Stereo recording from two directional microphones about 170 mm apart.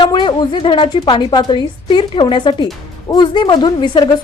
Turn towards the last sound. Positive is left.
turn(degrees=25)  # may be behind; listen again after turning